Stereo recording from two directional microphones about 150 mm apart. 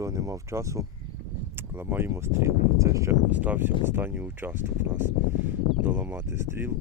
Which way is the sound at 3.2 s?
10° right (ahead or behind).